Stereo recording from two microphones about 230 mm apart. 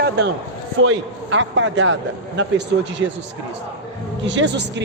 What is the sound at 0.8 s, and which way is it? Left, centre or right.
A man's voice, right.